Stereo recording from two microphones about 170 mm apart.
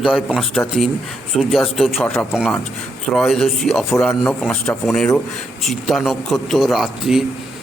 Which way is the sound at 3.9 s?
15° left (ahead or behind).